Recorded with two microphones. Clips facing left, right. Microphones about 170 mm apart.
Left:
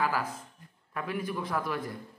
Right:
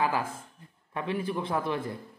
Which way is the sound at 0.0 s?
25° right (ahead or behind).